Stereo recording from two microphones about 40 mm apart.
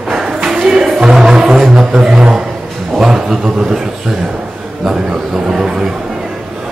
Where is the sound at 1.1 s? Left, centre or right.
Centre.